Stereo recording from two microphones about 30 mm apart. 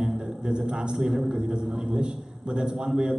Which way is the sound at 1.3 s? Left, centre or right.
Right.